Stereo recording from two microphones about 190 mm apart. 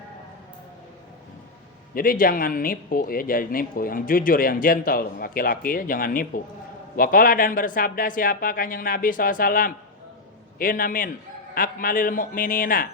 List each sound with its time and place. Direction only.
1.9 s a man's voice: 50° left (ahead or behind)